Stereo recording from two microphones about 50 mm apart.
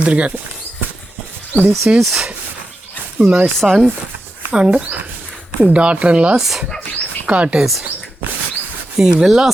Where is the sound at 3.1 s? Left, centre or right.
Right.